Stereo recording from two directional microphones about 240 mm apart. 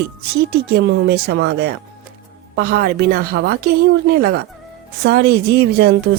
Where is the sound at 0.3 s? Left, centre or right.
Right.